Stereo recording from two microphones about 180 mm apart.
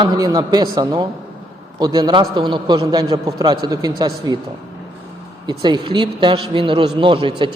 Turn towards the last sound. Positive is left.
turn(degrees=-30)  # may be behind; listen again after turning